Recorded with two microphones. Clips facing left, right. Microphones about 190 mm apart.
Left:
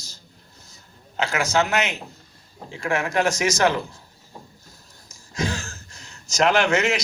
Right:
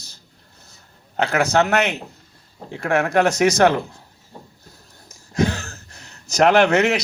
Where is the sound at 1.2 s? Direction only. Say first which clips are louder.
Right 4 dB; 60° right (ahead or behind).